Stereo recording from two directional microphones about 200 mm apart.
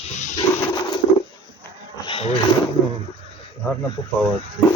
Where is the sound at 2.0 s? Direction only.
25° left (ahead or behind).